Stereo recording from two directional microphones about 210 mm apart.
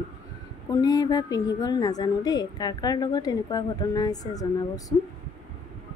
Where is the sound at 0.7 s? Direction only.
15° left (ahead or behind).